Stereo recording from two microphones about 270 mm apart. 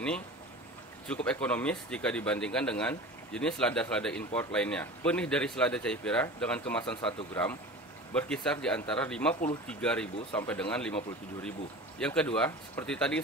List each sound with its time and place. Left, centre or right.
1.0 s speech: centre
6.8 s speech: centre
8.1 s speech: centre
12.0 s speech: centre